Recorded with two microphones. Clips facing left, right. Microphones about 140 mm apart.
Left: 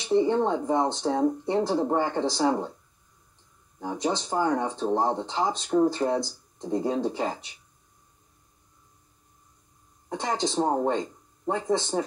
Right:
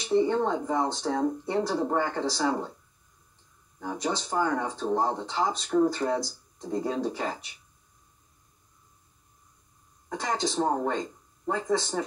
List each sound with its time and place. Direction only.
0.1 s speech: 25° left (ahead or behind)
3.8 s speech: 20° left (ahead or behind)
10.0 s speech: 25° left (ahead or behind)